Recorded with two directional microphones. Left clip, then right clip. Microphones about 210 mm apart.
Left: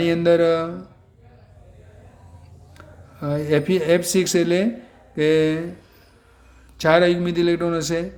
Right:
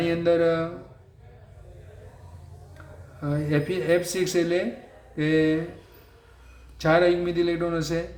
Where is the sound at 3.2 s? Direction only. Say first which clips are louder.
Left 6 dB; 45° left (ahead or behind).